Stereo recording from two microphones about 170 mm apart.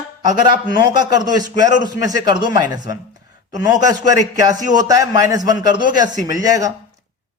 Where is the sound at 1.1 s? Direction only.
25° right (ahead or behind).